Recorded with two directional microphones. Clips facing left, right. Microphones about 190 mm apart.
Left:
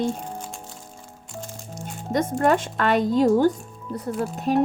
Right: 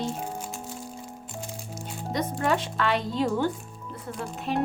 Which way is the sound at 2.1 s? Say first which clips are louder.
Left 6 dB; 50° left (ahead or behind).